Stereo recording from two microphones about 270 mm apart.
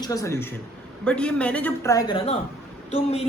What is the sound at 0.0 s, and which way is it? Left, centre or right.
A man's voice, centre.